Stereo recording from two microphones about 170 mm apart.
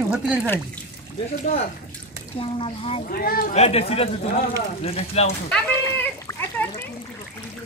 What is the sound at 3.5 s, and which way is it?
Speech, 35° left (ahead or behind).